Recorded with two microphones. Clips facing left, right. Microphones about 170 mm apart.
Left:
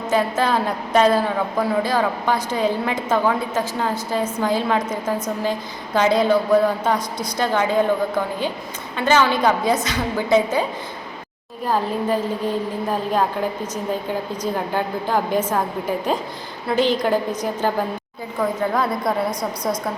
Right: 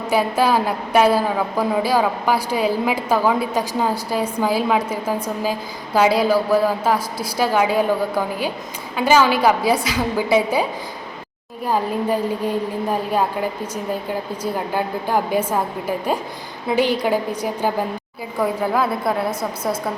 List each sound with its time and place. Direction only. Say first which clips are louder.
0.1 s a woman's voice: right 2 dB; 10° right (ahead or behind)
14.5 s a woman's voice: right 1 dB; 5° right (ahead or behind)